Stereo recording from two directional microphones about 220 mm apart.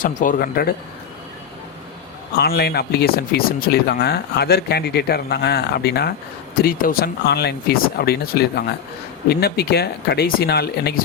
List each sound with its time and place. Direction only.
0.0 s speech: 35° left (ahead or behind)
2.4 s speech: 45° left (ahead or behind)